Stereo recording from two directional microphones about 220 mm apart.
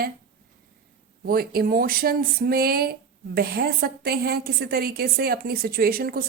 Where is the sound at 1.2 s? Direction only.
40° right (ahead or behind).